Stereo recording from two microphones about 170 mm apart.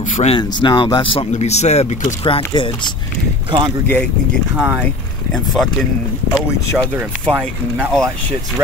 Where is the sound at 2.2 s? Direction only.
30° left (ahead or behind).